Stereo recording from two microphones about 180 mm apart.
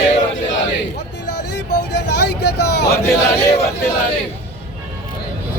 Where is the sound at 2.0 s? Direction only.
65° left (ahead or behind).